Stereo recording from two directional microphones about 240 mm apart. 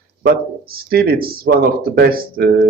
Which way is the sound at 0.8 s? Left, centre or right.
Right.